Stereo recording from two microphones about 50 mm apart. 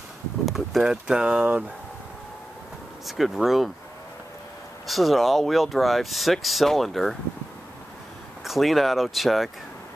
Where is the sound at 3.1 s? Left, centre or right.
Centre.